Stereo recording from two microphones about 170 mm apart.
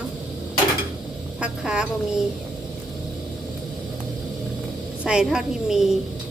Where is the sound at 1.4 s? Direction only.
5° right (ahead or behind).